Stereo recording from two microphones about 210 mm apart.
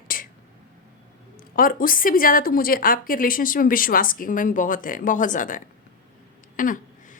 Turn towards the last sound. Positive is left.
turn(degrees=40)  # may be behind; listen again after turning